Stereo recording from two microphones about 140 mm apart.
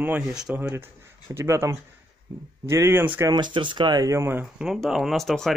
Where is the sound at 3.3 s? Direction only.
35° right (ahead or behind); by 5.5 s centre (ahead or behind).